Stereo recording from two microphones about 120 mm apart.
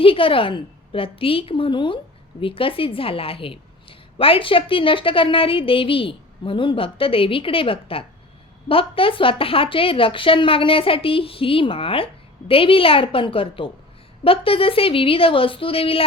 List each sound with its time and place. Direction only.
0.0 s a woman's voice: 50° left (ahead or behind)